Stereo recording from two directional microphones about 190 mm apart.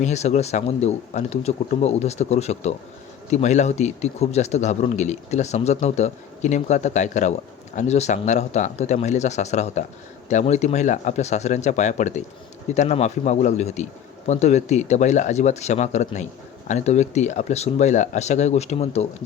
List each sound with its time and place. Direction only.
0.0 s speech: 35° left (ahead or behind)